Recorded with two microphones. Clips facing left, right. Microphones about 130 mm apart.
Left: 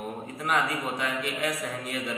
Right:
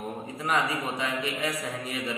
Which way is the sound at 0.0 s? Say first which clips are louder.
Even; centre (ahead or behind).